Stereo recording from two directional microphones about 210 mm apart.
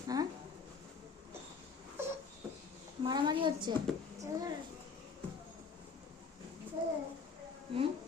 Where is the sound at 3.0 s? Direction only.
20° right (ahead or behind).